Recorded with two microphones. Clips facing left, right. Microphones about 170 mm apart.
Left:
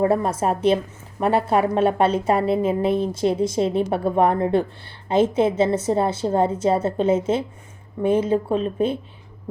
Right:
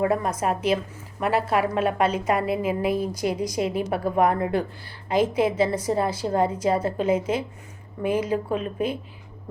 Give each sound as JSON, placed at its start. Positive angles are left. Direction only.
{"t": 0.0, "sound": "a woman's voice", "side_deg": 30}